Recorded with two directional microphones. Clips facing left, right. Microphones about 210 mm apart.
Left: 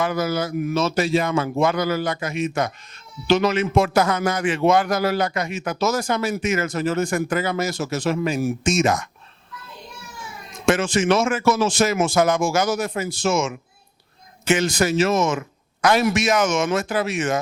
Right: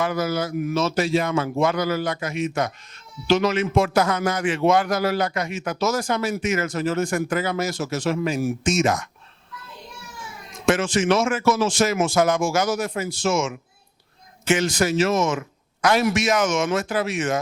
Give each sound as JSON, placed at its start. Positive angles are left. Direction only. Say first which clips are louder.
{"t": 0.0, "sound": "speech", "louder": "left 1 dB", "side_deg": 20}
{"t": 10.7, "sound": "speech", "louder": "left 1 dB", "side_deg": 15}
{"t": 11.7, "sound": "speech", "louder": "left 1 dB", "side_deg": 10}
{"t": 12.2, "sound": "speech", "louder": "left 1 dB", "side_deg": 25}